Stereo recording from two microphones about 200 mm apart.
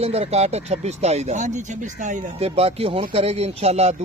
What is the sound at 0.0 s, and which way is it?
Speech, 30° right (ahead or behind).